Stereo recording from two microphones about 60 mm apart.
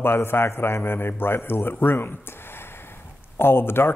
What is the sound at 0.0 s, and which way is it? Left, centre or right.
A man's voice, left.